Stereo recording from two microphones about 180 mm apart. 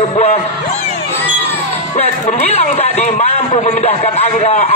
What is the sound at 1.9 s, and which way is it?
A man's voice, 35° left (ahead or behind).